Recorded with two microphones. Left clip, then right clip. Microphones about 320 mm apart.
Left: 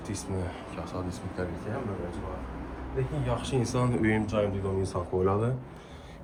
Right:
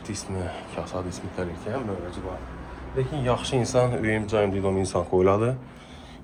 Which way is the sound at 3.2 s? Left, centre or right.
Centre.